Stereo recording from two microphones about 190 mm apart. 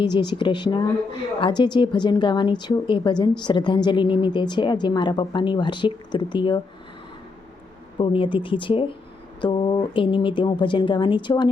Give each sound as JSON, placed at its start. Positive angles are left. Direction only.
{"t": 0.0, "sound": "a woman's voice", "side_deg": 25}
{"t": 7.9, "sound": "a woman's voice", "side_deg": 25}